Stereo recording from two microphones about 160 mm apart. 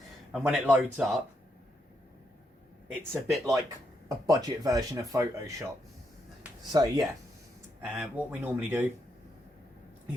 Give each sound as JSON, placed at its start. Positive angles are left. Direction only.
{"t": 0.3, "sound": "speech", "side_deg": -5}
{"t": 2.9, "sound": "speech", "side_deg": -15}
{"t": 6.7, "sound": "speech", "side_deg": -25}
{"t": 7.9, "sound": "speech", "side_deg": -5}